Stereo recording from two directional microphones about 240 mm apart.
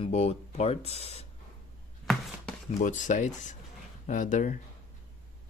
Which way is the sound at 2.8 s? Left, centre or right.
Left.